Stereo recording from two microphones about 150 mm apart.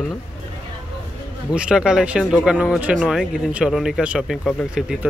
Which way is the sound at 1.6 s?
5° right (ahead or behind).